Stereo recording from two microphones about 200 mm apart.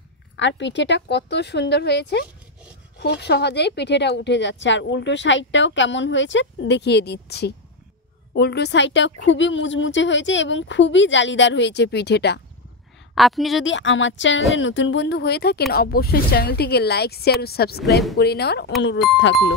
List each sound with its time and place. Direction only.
0.4 s speech: 65° left (ahead or behind)
13.1 s a woman's voice: centre (ahead or behind)
13.7 s a woman's voice: 70° left (ahead or behind)